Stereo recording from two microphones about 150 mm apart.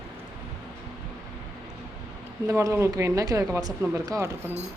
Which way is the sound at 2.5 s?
20° right (ahead or behind).